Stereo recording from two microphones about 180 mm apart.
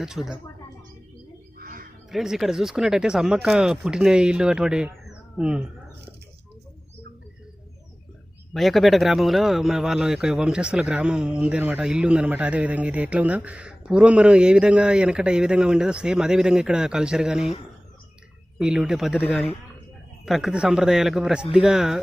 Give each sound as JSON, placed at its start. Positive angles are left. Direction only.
{"t": 0.0, "sound": "a man's voice", "side_deg": -5}
{"t": 1.5, "sound": "duck", "side_deg": -55}
{"t": 2.0, "sound": "a man's voice", "side_deg": 0}
{"t": 5.0, "sound": "a sound", "side_deg": -5}
{"t": 8.5, "sound": "a man's voice", "side_deg": 0}
{"t": 18.6, "sound": "a man's voice", "side_deg": -5}
{"t": 19.2, "sound": "speech", "side_deg": 10}
{"t": 20.2, "sound": "a man's voice", "side_deg": 0}